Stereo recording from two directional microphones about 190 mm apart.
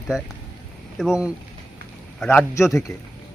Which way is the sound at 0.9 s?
5° right (ahead or behind).